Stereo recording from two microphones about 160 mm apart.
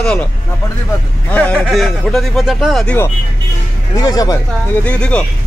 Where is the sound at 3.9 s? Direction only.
20° left (ahead or behind).